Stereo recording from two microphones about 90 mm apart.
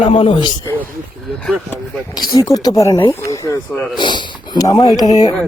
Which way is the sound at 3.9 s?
60° left (ahead or behind).